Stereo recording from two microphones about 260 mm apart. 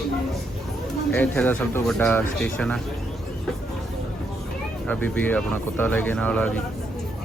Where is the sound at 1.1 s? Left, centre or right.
Centre.